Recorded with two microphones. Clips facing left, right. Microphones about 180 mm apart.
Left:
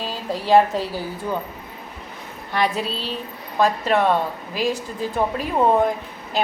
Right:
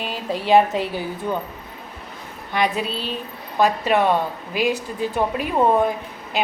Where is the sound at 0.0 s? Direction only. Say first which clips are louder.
Right 1 dB; 25° right (ahead or behind).